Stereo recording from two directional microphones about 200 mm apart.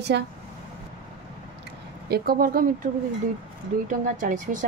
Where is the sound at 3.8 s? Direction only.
40° right (ahead or behind).